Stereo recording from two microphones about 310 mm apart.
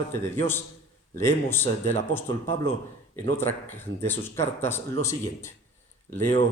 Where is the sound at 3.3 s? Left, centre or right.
Centre.